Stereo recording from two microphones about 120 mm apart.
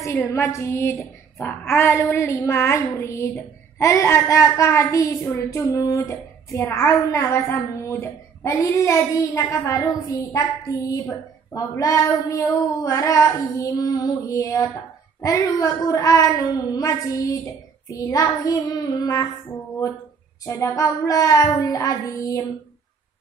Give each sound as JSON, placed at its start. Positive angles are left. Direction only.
{"t": 0.3, "sound": "a woman's voice", "side_deg": 25}
{"t": 20.4, "sound": "a woman's voice", "side_deg": 20}